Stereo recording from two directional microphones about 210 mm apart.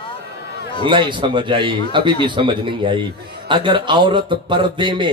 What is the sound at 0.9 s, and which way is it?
Speech, 25° right (ahead or behind).